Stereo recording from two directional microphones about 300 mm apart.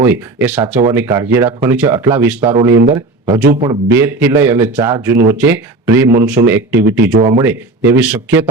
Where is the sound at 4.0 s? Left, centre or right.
Centre.